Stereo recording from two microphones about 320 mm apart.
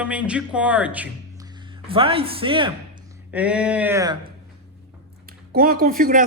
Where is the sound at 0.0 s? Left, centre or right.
Centre.